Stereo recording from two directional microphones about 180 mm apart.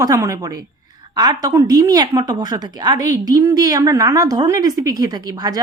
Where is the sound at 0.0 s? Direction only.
15° right (ahead or behind).